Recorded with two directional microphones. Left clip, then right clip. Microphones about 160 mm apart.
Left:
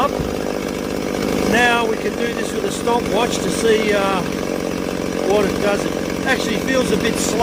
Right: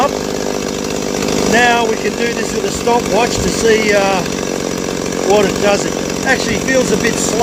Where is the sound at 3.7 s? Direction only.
30° right (ahead or behind).